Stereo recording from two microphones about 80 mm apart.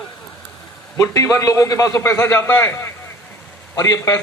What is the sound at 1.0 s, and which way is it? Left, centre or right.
A man's voice, left.